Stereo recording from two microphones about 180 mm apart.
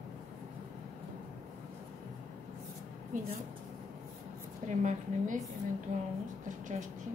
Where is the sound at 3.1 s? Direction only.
45° right (ahead or behind).